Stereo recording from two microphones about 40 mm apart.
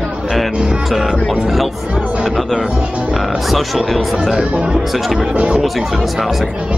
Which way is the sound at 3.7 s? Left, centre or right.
Centre.